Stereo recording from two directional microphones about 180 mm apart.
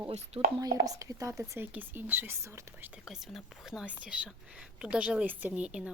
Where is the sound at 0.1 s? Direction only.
35° right (ahead or behind).